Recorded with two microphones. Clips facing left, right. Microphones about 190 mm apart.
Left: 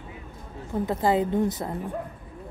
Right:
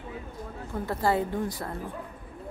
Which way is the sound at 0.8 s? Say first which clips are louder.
Left 3 dB; 20° left (ahead or behind).